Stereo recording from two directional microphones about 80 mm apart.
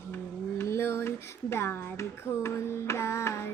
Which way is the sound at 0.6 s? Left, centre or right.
Left.